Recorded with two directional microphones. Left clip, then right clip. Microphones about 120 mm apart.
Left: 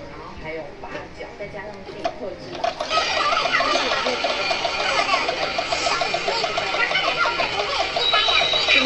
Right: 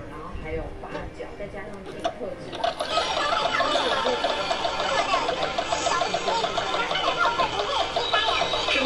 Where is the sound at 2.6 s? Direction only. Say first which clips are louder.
Left 3 dB; 20° right (ahead or behind).